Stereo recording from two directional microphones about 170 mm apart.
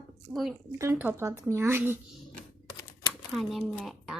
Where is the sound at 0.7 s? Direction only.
15° right (ahead or behind).